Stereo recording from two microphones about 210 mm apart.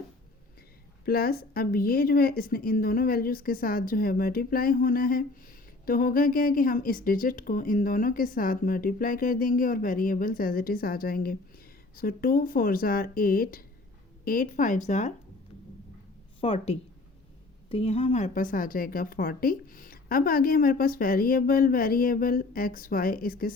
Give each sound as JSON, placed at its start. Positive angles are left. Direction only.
{"t": 1.0, "sound": "a woman's voice", "side_deg": 45}
{"t": 16.4, "sound": "a woman's voice", "side_deg": 25}